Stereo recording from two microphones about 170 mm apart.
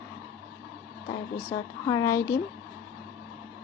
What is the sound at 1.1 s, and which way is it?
Speech, 20° left (ahead or behind).